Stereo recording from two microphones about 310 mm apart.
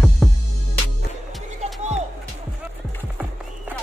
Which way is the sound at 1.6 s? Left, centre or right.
Right.